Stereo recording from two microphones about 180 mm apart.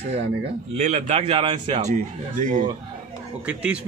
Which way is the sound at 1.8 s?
45° right (ahead or behind).